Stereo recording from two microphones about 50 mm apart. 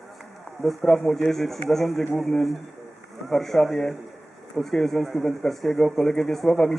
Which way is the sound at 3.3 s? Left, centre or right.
Centre.